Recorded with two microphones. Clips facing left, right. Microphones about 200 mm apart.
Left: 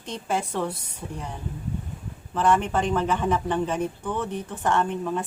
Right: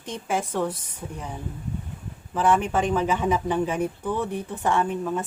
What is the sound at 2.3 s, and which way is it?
Speech, 5° right (ahead or behind).